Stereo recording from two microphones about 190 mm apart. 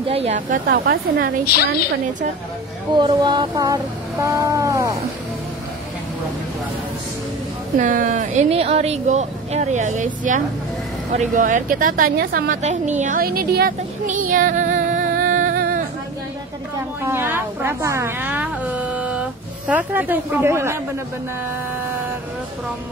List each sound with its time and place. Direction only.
0.1 s speech: 35° right (ahead or behind)
0.7 s speech: 50° right (ahead or behind)
3.0 s child singing: 20° right (ahead or behind)
7.7 s speech: 45° right (ahead or behind)
12.6 s speech: 40° right (ahead or behind)
14.0 s child singing: 45° right (ahead or behind)
17.0 s a sound: 10° right (ahead or behind)
19.7 s speech: 10° right (ahead or behind)